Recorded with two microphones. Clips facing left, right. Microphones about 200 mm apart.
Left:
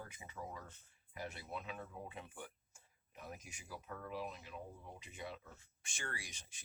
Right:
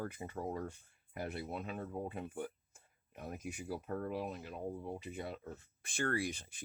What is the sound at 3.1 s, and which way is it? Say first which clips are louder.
Speech: right 8 dB; 60° right (ahead or behind).